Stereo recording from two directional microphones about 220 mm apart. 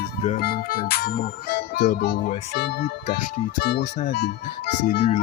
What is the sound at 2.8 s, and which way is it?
Music, 35° left (ahead or behind).